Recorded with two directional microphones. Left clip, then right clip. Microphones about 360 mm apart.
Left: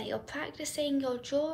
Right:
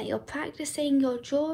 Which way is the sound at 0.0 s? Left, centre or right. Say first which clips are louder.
Right 4 dB; centre.